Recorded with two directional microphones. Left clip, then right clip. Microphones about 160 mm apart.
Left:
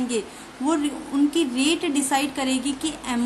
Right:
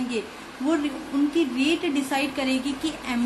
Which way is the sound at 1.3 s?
20° left (ahead or behind).